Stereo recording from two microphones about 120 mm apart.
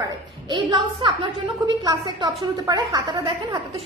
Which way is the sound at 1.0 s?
40° right (ahead or behind).